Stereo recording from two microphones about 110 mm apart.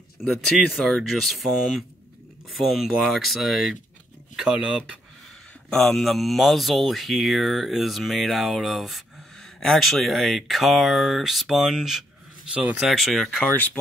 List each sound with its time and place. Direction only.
0.2 s speech: centre (ahead or behind)
5.7 s speech: 5° left (ahead or behind)